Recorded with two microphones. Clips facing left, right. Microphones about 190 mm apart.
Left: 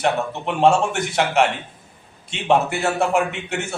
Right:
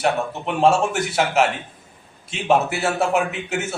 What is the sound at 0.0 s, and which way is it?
A man's voice, centre (ahead or behind).